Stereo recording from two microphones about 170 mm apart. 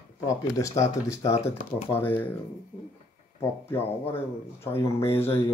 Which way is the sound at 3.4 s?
15° left (ahead or behind).